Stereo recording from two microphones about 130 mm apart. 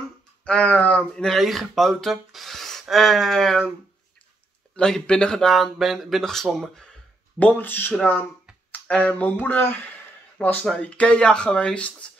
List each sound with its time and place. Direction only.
0.5 s speech: 10° left (ahead or behind)
4.7 s speech: 5° left (ahead or behind)